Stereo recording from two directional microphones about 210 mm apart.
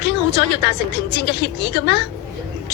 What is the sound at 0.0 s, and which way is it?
A woman's voice, 55° left (ahead or behind).